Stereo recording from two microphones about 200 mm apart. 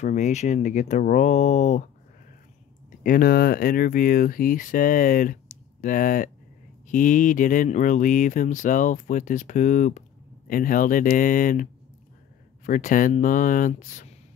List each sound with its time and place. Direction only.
0.0 s speech: 35° left (ahead or behind)
3.0 s speech: 45° left (ahead or behind)